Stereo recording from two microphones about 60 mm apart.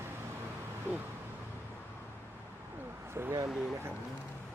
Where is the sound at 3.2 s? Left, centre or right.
Right.